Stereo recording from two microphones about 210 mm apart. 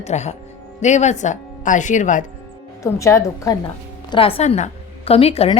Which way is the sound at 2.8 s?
15° left (ahead or behind).